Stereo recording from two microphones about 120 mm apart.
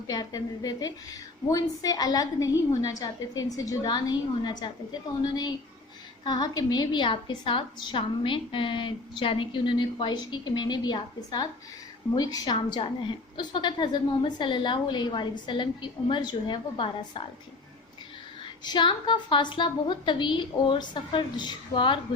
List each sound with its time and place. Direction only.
0.1 s a woman's voice: 30° left (ahead or behind)
18.6 s a woman's voice: 40° left (ahead or behind)